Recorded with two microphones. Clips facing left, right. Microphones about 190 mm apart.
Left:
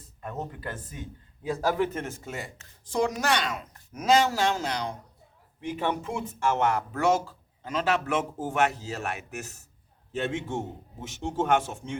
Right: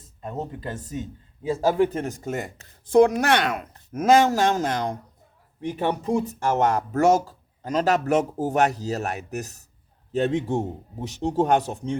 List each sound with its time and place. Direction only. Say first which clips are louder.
0.2 s speech: right 4 dB; 25° right (ahead or behind); by 4.9 s 50° right (ahead or behind)
5.5 s speech: right 4 dB; 40° right (ahead or behind)